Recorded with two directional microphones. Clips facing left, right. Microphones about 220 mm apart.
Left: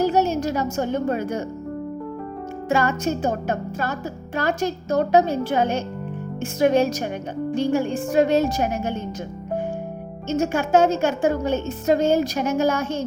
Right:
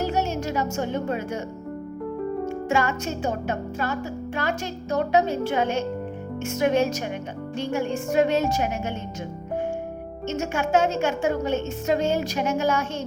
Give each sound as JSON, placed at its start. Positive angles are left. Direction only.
{"t": 0.0, "sound": "music", "side_deg": 35}
{"t": 2.6, "sound": "a woman's voice", "side_deg": 35}
{"t": 10.2, "sound": "a woman's voice", "side_deg": 35}